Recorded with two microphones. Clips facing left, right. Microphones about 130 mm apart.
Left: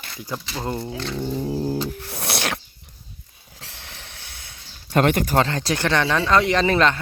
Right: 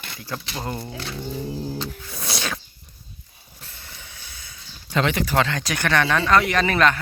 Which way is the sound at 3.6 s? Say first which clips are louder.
Left 2 dB; 90° left.